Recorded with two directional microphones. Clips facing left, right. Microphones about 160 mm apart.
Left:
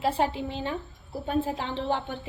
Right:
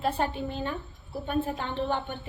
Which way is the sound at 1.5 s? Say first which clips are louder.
Left 1 dB; 90° left.